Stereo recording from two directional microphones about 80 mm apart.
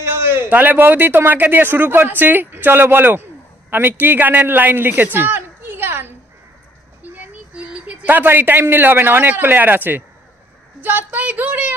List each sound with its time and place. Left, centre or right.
0.0 s a man's voice: right